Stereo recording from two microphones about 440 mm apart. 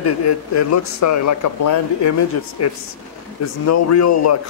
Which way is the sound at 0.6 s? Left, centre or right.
Left.